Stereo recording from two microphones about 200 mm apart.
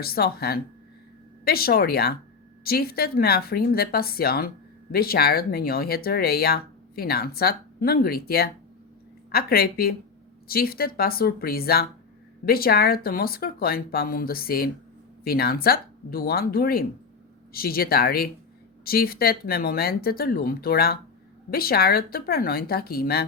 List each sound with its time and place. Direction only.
0.0 s speech: 50° left (ahead or behind)